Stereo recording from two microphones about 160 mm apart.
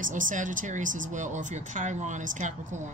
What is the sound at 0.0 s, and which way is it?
Speech, 55° right (ahead or behind).